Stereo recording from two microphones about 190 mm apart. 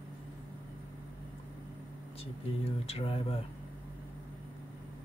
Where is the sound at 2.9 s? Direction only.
30° left (ahead or behind).